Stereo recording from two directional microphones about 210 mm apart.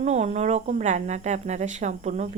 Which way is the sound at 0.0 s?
35° right (ahead or behind).